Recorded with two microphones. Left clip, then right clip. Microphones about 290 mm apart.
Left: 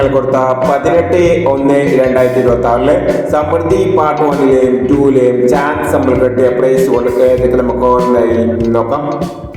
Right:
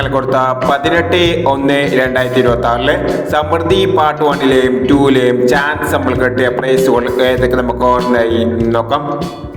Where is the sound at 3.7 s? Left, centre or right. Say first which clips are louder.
Even; right.